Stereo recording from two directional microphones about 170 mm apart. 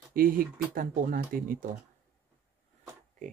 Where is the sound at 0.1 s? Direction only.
55° right (ahead or behind).